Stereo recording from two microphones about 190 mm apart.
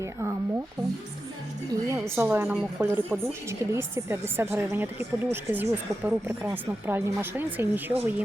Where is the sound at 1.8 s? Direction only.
15° right (ahead or behind).